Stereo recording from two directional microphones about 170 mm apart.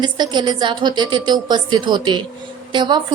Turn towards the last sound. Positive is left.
turn(degrees=-25)  # may be behind; listen again after turning